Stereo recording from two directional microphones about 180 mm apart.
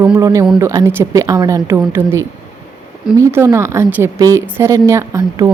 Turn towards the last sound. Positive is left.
turn(degrees=-15)  # may be behind; listen again after turning